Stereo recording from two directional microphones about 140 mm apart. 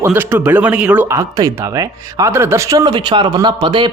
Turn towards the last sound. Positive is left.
turn(degrees=-35)  # may be behind; listen again after turning